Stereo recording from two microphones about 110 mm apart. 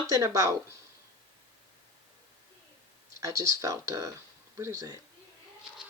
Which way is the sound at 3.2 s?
30° right (ahead or behind).